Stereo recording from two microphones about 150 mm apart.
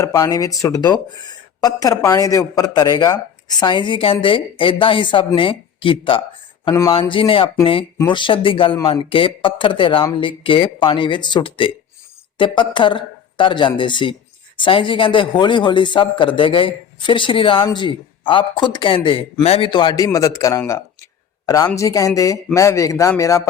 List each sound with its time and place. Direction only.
0.0 s speech: 25° left (ahead or behind)
6.7 s speech: 20° left (ahead or behind)
7.1 s speech: 35° left (ahead or behind)